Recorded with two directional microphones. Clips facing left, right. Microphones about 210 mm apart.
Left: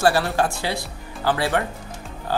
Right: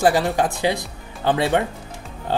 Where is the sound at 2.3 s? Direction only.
25° right (ahead or behind).